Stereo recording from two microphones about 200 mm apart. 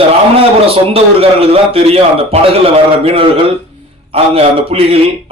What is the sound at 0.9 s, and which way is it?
A man's voice, 30° right (ahead or behind).